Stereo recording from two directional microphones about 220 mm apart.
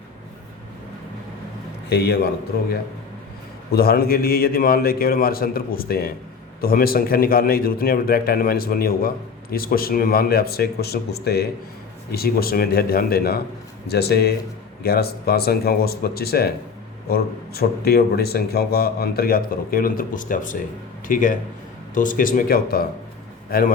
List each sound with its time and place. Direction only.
1.9 s a man's voice: 45° left (ahead or behind)
3.7 s a man's voice: 45° left (ahead or behind)